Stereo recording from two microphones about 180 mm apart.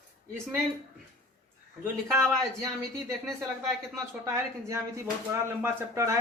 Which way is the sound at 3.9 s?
15° right (ahead or behind).